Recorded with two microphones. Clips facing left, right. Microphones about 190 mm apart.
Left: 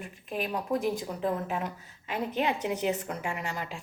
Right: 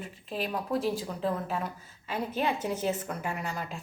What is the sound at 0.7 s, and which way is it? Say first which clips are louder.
A woman's voice: left 1 dB; 15° left (ahead or behind).